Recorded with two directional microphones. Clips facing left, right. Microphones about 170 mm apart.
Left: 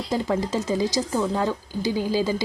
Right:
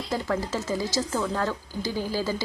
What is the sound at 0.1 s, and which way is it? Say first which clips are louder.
A woman's voice: left 4 dB; 15° left (ahead or behind).